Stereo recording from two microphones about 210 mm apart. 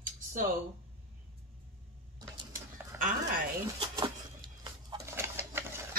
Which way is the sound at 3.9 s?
20° right (ahead or behind).